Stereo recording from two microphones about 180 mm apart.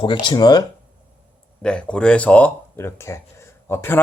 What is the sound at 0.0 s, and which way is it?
Speech, 25° left (ahead or behind).